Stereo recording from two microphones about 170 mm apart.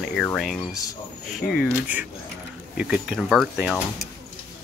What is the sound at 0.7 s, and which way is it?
Speech, 20° left (ahead or behind).